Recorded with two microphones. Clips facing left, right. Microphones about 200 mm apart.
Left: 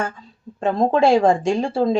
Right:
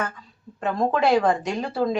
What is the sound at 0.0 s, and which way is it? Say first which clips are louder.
A woman's voice: left 3 dB; 30° left (ahead or behind).